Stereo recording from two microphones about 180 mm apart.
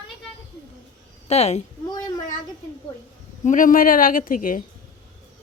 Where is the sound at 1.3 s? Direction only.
35° left (ahead or behind).